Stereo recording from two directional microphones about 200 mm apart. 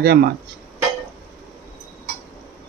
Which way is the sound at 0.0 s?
50° right (ahead or behind).